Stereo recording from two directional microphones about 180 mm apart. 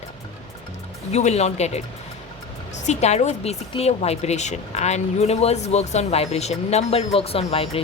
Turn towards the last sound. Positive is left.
turn(degrees=30)  # may be behind; listen again after turning